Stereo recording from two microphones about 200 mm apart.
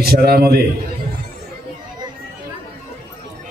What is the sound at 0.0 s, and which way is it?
Speech, 50° right (ahead or behind).